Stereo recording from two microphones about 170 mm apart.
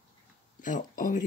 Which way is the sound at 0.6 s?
50° left (ahead or behind).